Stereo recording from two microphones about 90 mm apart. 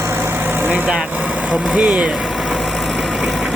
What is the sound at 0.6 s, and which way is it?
Speech, 20° right (ahead or behind).